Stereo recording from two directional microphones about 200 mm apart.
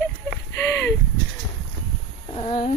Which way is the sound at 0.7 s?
10° left (ahead or behind).